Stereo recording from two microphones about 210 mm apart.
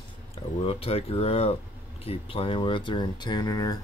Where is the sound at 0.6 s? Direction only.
25° left (ahead or behind).